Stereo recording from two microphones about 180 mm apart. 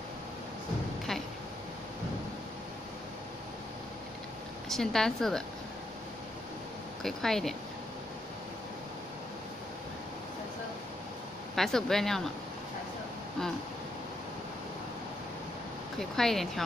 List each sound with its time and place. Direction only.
4.6 s speech: centre (ahead or behind)
7.0 s speech: centre (ahead or behind)
11.5 s speech: centre (ahead or behind)
16.0 s speech: centre (ahead or behind)